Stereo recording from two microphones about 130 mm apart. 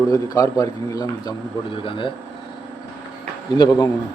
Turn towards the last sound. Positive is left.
turn(degrees=30)  # may be behind; listen again after turning